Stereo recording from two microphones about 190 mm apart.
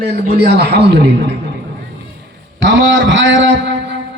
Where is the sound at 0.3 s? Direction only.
60° right (ahead or behind).